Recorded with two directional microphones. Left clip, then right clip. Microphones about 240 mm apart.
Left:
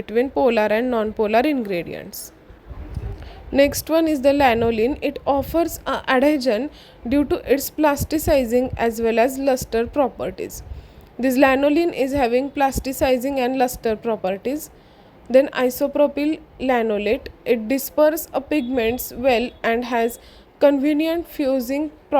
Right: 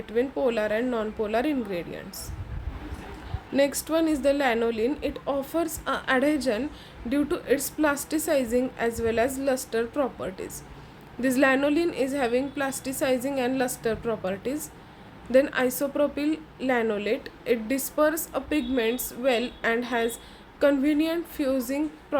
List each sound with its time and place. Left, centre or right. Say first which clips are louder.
0.0 s speech: left 7 dB; left
3.5 s a woman's voice: left 7 dB; left